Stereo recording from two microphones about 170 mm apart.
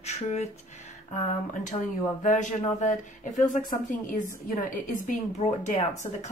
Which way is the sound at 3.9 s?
50° left (ahead or behind).